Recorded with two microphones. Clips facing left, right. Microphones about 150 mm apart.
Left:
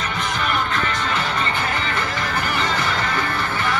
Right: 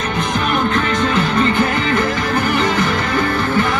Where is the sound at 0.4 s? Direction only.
60° right (ahead or behind).